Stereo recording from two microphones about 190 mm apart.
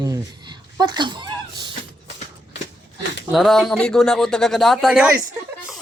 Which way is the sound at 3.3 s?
Centre (ahead or behind).